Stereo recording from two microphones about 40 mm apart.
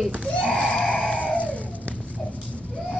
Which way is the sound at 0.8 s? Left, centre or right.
Left.